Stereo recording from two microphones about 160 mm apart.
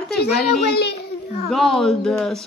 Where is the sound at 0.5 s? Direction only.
80° left.